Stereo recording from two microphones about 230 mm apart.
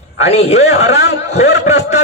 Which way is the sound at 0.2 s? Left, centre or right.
Left.